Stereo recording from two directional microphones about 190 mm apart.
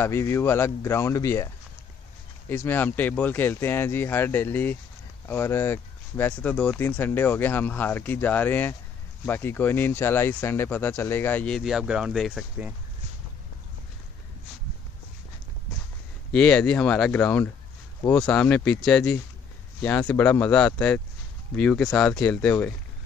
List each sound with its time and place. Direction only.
0.0 s speech: 15° left (ahead or behind)
2.5 s speech: 10° left (ahead or behind)
16.3 s speech: 5° left (ahead or behind)